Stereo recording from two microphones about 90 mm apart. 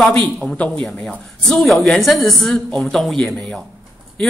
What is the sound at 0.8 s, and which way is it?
A man's voice, 5° left (ahead or behind).